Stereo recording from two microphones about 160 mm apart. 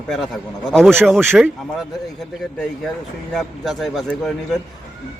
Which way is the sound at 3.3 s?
Centre (ahead or behind).